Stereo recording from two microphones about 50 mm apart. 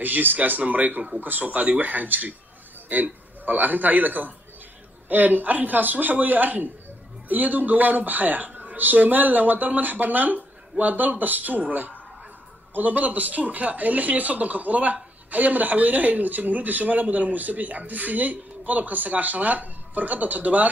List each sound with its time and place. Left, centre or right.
0.0 s a man's voice: right
12.7 s speech: right